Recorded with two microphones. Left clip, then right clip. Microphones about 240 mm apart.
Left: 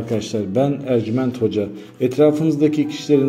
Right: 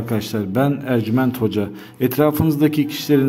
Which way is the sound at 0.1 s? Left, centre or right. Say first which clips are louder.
Left 2 dB; right.